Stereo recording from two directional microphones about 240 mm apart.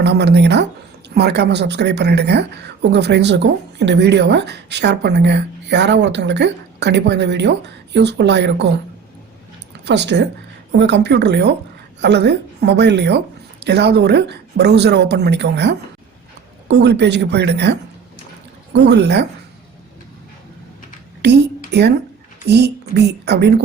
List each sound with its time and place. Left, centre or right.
0.0 s speech: right
9.8 s speech: right
21.2 s speech: right